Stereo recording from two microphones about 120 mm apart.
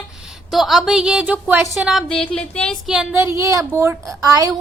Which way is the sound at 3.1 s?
20° right (ahead or behind).